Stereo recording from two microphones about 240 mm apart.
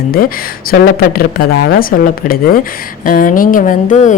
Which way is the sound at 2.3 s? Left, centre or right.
Left.